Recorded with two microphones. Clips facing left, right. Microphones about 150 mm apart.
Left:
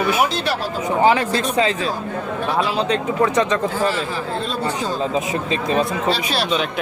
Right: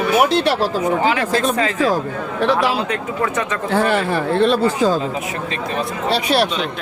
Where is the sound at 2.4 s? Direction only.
90° right.